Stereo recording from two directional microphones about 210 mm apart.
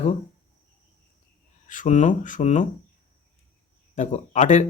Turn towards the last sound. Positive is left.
turn(degrees=35)  # may be behind; listen again after turning